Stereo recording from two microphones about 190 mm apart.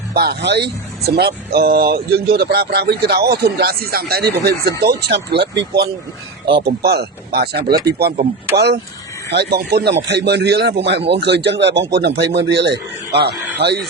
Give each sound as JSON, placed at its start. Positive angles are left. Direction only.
{"t": 0.1, "sound": "speech", "side_deg": -55}